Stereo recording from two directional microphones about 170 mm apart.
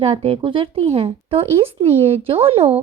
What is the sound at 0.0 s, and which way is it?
Speech, 35° right (ahead or behind).